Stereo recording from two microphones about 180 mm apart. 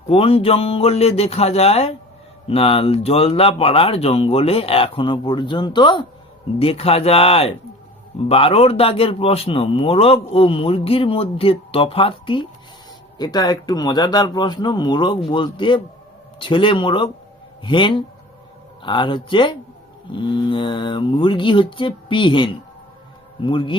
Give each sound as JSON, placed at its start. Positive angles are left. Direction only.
{"t": 0.1, "sound": "a man's voice", "side_deg": 30}
{"t": 13.1, "sound": "mantra", "side_deg": 25}